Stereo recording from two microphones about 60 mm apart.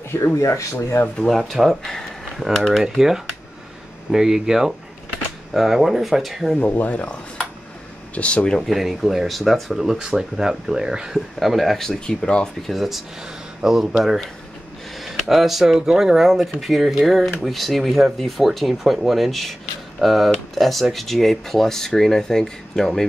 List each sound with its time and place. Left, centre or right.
0.1 s speech: left
0.4 s speech: left
1.0 s speech: centre
1.5 s speech: centre
6.6 s speech: left
8.1 s speech: left
8.5 s speech: centre
12.6 s speech: centre